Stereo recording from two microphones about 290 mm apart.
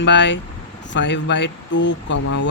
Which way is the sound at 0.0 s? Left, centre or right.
Left.